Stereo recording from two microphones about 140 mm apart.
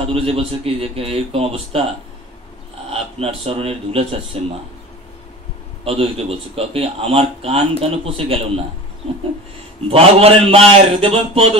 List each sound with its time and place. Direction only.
0.0 s speech: 45° right (ahead or behind)
2.9 s speech: 45° right (ahead or behind)
5.9 s speech: 45° right (ahead or behind)
9.8 s speech: 45° right (ahead or behind)